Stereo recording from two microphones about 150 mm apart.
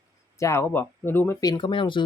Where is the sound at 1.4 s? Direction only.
30° left (ahead or behind).